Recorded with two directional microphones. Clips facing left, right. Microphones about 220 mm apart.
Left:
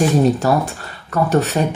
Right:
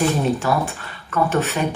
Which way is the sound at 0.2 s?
40° left (ahead or behind).